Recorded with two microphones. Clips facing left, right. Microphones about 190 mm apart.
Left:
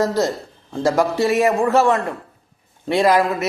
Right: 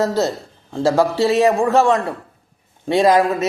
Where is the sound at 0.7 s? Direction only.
15° right (ahead or behind).